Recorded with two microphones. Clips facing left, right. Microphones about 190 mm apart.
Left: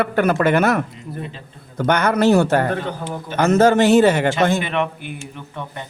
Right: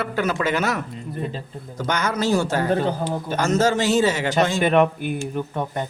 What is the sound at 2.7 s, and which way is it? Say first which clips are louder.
Speech: right 3 dB; 35° right (ahead or behind).